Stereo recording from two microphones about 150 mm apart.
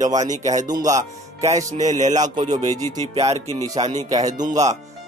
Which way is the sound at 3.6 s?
25° right (ahead or behind).